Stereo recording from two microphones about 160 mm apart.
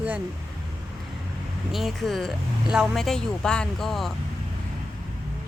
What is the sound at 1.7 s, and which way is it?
Speech, centre (ahead or behind).